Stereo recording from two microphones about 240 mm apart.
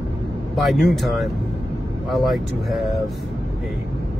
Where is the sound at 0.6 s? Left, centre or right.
Centre.